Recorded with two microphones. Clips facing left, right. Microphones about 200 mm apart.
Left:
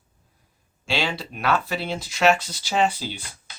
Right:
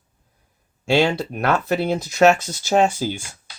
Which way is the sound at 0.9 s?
45° right (ahead or behind).